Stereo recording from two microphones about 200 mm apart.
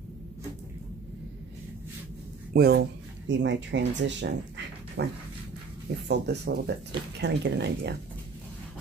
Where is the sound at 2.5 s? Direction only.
50° right (ahead or behind).